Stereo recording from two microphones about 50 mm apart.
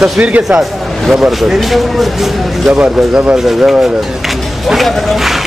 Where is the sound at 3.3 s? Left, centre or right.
Centre.